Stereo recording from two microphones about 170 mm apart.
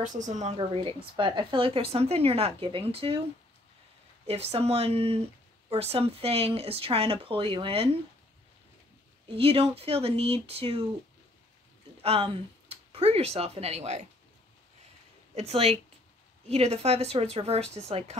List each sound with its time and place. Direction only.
0.0 s a woman's voice: 45° right (ahead or behind)
4.3 s a woman's voice: 35° right (ahead or behind)
9.3 s a woman's voice: 35° right (ahead or behind)
12.0 s speech: 35° right (ahead or behind)
15.3 s a woman's voice: 35° right (ahead or behind)